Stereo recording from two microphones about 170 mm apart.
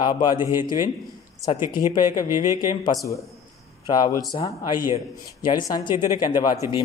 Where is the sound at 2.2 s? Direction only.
15° right (ahead or behind).